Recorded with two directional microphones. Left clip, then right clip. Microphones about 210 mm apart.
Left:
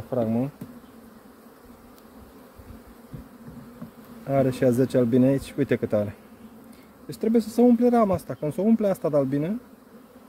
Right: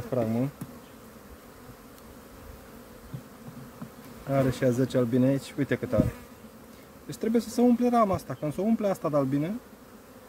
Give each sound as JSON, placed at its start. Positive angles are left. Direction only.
{"t": 0.1, "sound": "bee", "side_deg": 10}
{"t": 4.3, "sound": "speech", "side_deg": 25}
{"t": 7.1, "sound": "speech", "side_deg": 20}